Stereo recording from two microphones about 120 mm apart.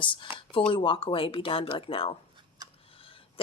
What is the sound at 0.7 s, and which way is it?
Speech, 45° left (ahead or behind).